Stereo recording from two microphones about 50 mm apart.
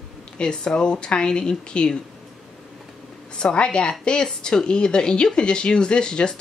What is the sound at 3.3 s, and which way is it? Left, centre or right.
Speech, centre.